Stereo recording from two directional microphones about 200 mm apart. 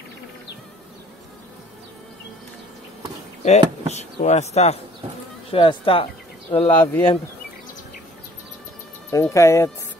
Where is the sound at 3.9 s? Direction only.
35° left (ahead or behind).